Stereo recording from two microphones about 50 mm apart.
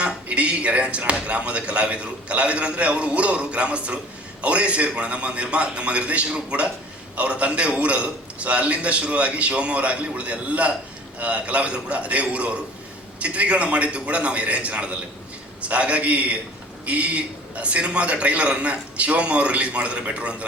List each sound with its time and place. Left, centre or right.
0.0 s speech: right